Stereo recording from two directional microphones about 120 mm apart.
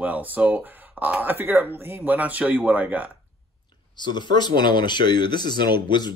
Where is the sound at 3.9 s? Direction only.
40° left (ahead or behind).